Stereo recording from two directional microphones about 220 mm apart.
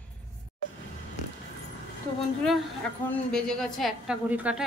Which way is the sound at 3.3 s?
Centre (ahead or behind).